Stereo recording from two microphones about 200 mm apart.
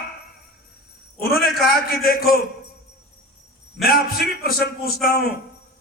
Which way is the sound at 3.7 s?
50° left (ahead or behind).